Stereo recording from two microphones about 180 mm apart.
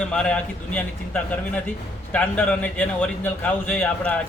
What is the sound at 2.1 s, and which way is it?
A man's voice, 10° left (ahead or behind).